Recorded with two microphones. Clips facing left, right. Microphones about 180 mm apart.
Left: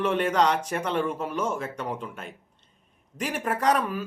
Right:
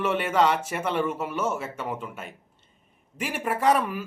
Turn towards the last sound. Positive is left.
turn(degrees=-10)  # may be behind; listen again after turning